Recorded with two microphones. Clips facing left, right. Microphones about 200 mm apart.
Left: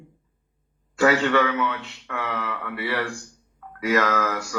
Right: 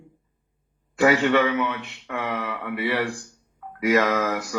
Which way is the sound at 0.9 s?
20° right (ahead or behind).